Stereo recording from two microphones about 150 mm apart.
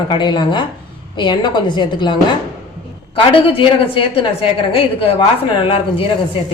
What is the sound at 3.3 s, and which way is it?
Speech, 35° left (ahead or behind).